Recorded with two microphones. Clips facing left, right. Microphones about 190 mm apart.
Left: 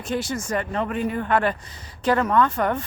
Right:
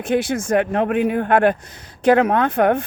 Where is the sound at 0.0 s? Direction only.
55° right (ahead or behind).